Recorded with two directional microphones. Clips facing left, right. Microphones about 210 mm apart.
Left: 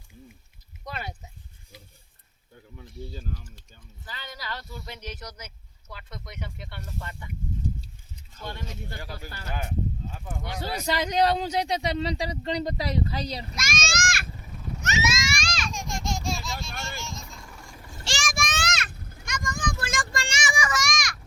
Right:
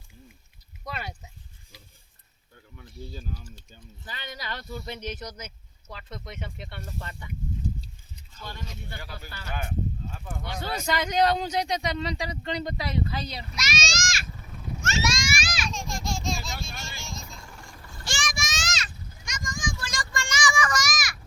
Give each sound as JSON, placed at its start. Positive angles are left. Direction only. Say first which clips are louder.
{"t": 4.0, "sound": "speech", "louder": "right 1 dB", "side_deg": -15}
{"t": 8.7, "sound": "a man's voice", "louder": "left 2 dB", "side_deg": 40}
{"t": 10.1, "sound": "speech", "louder": "left 1 dB", "side_deg": 15}
{"t": 10.8, "sound": "a man's voice", "louder": "even", "side_deg": 35}
{"t": 14.8, "sound": "a sound", "louder": "even", "side_deg": 15}
{"t": 15.0, "sound": "a sound", "louder": "even", "side_deg": 5}
{"t": 15.7, "sound": "children playing", "louder": "left 1 dB", "side_deg": 20}
{"t": 18.2, "sound": "a sound", "louder": "left 4 dB", "side_deg": 50}
{"t": 20.1, "sound": "child singing", "louder": "right 1 dB", "side_deg": 30}
{"t": 20.6, "sound": "children playing", "louder": "right 1 dB", "side_deg": 5}